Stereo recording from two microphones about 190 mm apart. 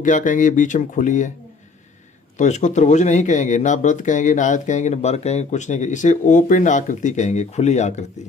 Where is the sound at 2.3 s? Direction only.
40° left (ahead or behind).